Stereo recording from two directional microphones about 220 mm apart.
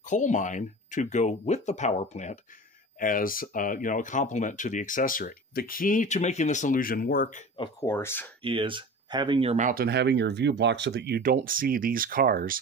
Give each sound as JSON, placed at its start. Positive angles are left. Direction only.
{"t": 0.0, "sound": "speech", "side_deg": 35}
{"t": 7.5, "sound": "speech", "side_deg": 20}
{"t": 8.4, "sound": "speech", "side_deg": -25}